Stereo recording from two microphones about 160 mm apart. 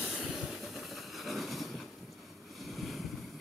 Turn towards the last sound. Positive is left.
turn(degrees=0)  # may be behind; listen again after turning